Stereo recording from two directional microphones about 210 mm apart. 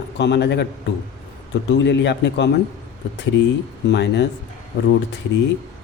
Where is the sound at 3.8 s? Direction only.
55° left (ahead or behind).